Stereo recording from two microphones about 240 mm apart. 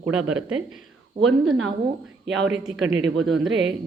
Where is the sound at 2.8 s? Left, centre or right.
Right.